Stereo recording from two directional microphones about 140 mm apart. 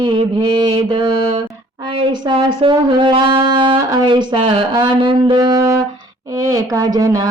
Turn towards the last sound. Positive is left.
turn(degrees=-25)  # may be behind; listen again after turning